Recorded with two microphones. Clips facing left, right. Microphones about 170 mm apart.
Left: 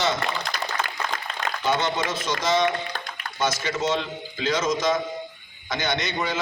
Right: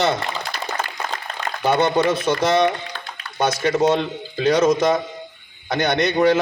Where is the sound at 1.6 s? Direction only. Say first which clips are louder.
Right 8 dB; 60° right (ahead or behind).